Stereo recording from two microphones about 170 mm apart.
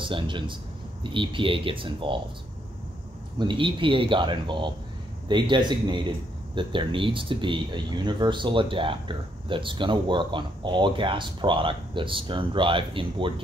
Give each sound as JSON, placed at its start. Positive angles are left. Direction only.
{"t": 0.0, "sound": "speech", "side_deg": -30}
{"t": 3.3, "sound": "speech", "side_deg": -30}